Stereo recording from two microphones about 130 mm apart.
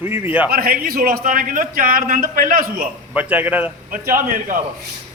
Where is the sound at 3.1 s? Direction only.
10° right (ahead or behind).